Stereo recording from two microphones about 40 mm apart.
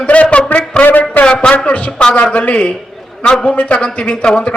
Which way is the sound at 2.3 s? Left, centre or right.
Left.